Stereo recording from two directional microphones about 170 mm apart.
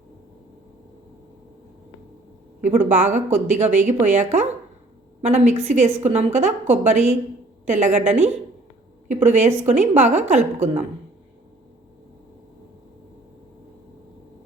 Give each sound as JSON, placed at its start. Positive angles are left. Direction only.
{"t": 2.6, "sound": "a woman's voice", "side_deg": -45}